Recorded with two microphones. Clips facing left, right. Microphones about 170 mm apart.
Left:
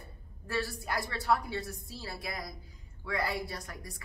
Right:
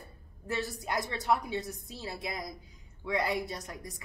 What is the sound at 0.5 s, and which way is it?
A woman's voice, 20° right (ahead or behind).